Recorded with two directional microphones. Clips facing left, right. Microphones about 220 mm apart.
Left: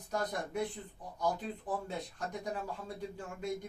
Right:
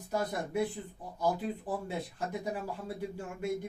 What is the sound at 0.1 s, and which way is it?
Speech, 5° right (ahead or behind).